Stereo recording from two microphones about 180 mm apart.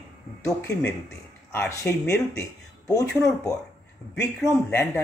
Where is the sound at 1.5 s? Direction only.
15° left (ahead or behind).